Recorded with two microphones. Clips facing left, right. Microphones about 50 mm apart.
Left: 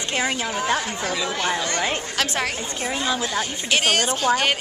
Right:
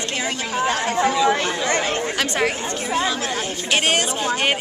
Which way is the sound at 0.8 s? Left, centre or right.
Right.